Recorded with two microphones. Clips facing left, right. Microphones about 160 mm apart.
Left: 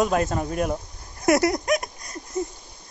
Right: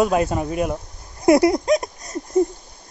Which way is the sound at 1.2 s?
25° right (ahead or behind).